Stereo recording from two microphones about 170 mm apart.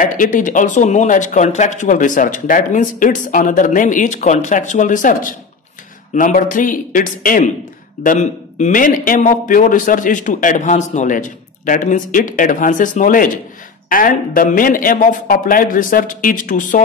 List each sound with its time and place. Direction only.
0.0 s a man's voice: 50° left (ahead or behind)